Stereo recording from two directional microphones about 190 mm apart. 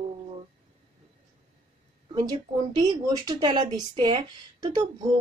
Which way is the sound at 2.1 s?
20° right (ahead or behind).